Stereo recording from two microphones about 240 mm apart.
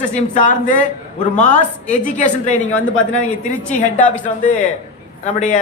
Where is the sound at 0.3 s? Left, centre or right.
Left.